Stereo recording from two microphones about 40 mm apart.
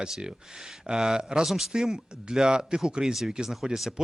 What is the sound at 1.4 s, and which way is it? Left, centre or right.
Speech, centre.